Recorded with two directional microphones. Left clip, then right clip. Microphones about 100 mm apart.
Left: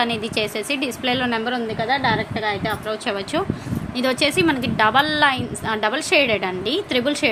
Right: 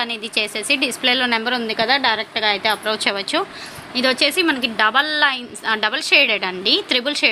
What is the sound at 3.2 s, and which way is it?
Speech, 10° right (ahead or behind).